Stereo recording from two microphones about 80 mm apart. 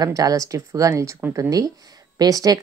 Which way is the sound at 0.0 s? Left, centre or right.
Right.